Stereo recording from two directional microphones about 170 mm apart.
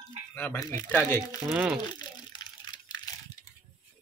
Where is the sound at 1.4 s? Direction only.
10° right (ahead or behind).